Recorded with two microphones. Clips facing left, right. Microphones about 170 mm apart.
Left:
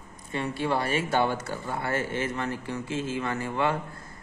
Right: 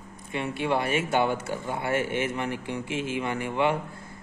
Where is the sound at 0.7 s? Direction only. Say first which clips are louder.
Right 2 dB; 15° right (ahead or behind).